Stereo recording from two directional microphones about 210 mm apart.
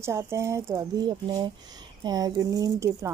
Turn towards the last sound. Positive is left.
turn(degrees=-15)  # may be behind; listen again after turning